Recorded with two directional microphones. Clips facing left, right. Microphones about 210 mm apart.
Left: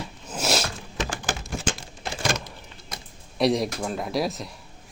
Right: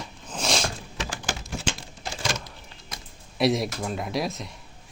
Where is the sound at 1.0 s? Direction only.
50° left (ahead or behind).